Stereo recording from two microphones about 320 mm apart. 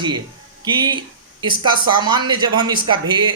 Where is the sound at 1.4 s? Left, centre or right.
Centre.